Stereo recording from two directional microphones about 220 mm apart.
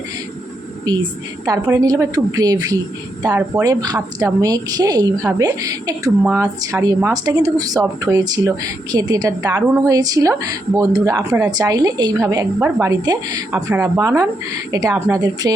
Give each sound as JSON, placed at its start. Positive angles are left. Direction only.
{"t": 1.5, "sound": "speech", "side_deg": -15}